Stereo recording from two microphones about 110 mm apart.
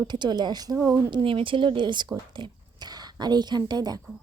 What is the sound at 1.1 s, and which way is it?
A woman's voice, 50° right (ahead or behind).